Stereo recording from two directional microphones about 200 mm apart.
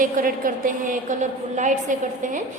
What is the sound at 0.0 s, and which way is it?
A woman's voice, 45° right (ahead or behind).